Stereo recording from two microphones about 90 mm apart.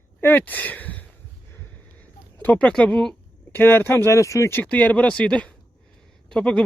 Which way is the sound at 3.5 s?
20° left (ahead or behind).